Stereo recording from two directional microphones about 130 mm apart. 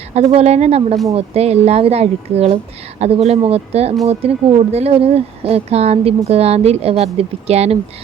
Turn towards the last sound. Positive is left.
turn(degrees=-55)  # may be behind; listen again after turning